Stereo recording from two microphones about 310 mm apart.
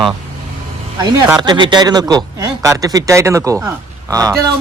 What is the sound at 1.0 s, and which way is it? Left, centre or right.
Speech, centre.